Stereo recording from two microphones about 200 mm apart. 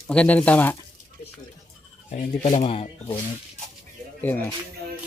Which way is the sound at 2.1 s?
35° left (ahead or behind).